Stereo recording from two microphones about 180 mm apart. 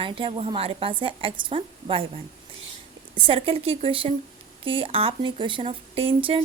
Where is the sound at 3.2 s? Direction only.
30° right (ahead or behind).